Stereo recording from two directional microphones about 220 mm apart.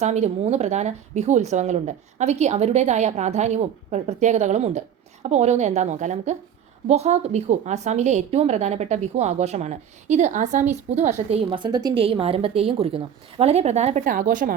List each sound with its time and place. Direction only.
0.0 s a woman's voice: 30° right (ahead or behind)